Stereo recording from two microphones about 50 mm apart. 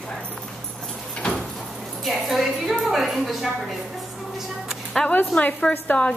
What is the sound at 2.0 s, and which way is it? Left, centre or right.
A woman's voice, centre.